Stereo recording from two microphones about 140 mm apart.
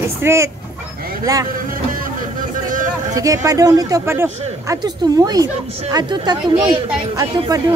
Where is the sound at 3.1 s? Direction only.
25° right (ahead or behind).